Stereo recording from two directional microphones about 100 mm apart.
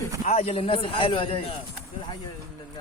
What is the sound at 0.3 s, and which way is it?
Speech, 85° left.